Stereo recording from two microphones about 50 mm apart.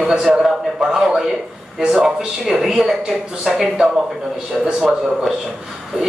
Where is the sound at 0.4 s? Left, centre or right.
Centre.